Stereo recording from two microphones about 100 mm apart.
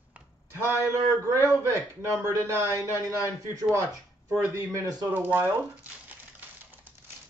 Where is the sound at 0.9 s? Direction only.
25° right (ahead or behind).